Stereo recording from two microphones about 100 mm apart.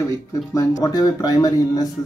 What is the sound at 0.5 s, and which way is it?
Speech, 35° left (ahead or behind).